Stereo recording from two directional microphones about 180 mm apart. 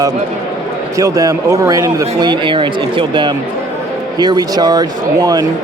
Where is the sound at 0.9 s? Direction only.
20° right (ahead or behind).